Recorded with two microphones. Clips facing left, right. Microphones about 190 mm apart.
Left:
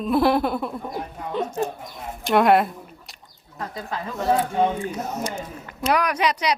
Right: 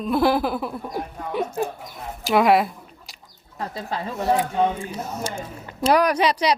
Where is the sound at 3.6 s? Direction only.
30° right (ahead or behind).